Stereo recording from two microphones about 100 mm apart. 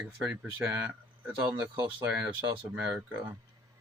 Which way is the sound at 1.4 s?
50° right (ahead or behind).